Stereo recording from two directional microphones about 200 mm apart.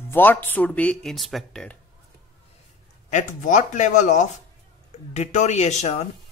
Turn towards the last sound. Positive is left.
turn(degrees=35)  # may be behind; listen again after turning